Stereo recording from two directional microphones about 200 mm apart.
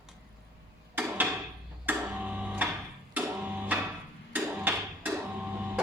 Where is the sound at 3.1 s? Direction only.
10° right (ahead or behind).